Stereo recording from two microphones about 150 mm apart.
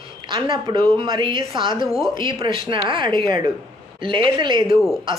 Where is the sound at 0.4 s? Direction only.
35° right (ahead or behind).